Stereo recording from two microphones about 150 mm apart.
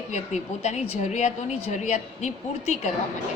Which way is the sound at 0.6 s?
50° left (ahead or behind).